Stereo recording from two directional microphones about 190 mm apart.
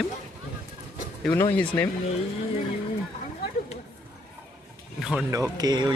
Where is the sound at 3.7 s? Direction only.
35° left (ahead or behind).